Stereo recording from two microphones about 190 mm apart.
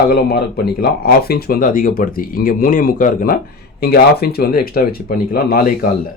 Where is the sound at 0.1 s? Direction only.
55° left (ahead or behind).